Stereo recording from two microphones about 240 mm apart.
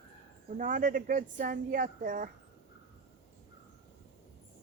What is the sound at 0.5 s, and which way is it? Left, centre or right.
Speech, right.